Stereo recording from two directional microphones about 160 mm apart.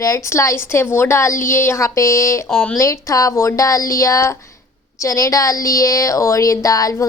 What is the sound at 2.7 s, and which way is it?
A woman's voice, 20° left (ahead or behind).